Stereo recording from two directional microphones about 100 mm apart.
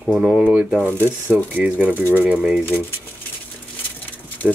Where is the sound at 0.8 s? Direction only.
20° left (ahead or behind).